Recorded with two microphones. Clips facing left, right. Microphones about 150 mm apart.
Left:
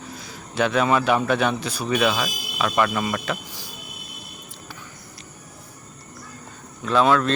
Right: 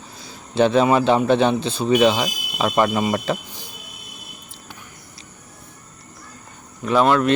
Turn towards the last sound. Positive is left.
turn(degrees=-5)  # may be behind; listen again after turning